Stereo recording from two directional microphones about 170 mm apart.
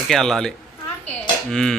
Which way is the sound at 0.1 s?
Centre (ahead or behind).